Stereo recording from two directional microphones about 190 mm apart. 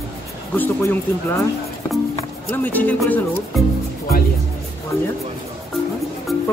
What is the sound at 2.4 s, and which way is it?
Speech, 10° left (ahead or behind).